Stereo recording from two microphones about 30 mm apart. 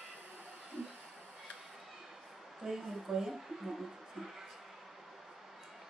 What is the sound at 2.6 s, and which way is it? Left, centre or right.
Speech, centre.